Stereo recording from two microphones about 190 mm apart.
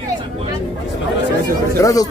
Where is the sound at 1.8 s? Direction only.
20° left (ahead or behind).